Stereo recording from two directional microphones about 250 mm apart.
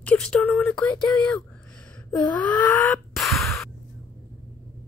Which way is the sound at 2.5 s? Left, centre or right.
Centre.